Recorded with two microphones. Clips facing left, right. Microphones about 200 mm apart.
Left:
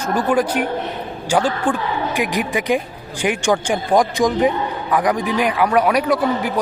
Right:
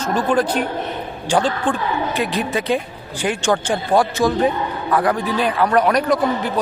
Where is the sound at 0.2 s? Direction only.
10° left (ahead or behind).